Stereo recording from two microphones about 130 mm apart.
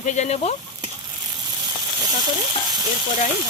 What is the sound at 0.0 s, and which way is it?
Speech, 70° left (ahead or behind).